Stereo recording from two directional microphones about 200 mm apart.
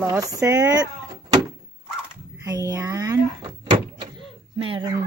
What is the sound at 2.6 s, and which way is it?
Speech, 20° right (ahead or behind).